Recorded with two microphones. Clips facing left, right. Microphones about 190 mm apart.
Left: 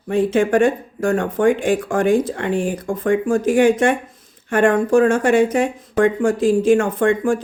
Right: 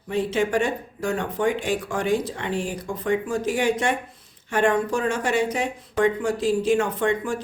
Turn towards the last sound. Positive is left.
turn(degrees=50)  # may be behind; listen again after turning